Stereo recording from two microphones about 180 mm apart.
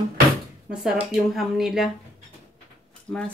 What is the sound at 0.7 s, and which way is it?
Speech, 5° right (ahead or behind).